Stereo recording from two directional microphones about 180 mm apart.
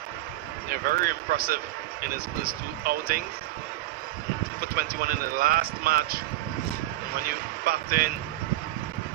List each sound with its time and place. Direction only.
0.9 s speech: 50° right (ahead or behind)
4.7 s speech: 55° right (ahead or behind)
7.2 s speech: 55° right (ahead or behind)